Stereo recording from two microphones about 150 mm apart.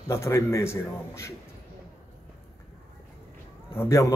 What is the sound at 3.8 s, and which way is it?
Speech, 20° left (ahead or behind).